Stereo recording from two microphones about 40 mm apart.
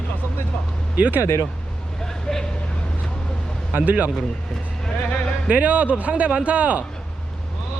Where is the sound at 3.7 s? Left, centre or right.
Right.